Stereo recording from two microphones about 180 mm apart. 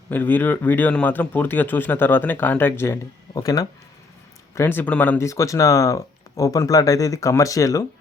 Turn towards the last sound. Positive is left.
turn(degrees=20)  # may be behind; listen again after turning